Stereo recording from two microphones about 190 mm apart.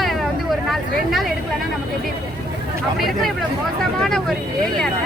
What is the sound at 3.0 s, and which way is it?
Speech, centre (ahead or behind).